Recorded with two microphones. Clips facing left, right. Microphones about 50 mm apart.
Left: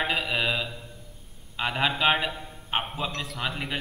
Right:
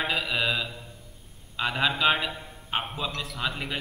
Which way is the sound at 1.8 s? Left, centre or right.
Centre.